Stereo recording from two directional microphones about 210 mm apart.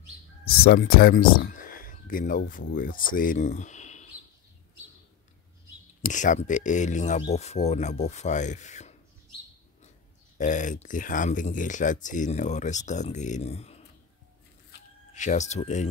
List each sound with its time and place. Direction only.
0.7 s speech: 45° left (ahead or behind)
6.0 s speech: 35° left (ahead or behind)
10.3 s speech: 35° left (ahead or behind)
15.1 s speech: 35° left (ahead or behind)